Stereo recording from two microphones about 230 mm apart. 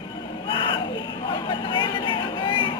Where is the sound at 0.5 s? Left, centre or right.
Left.